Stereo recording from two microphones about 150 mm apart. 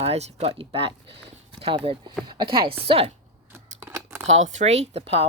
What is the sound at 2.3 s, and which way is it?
Speech, 35° right (ahead or behind).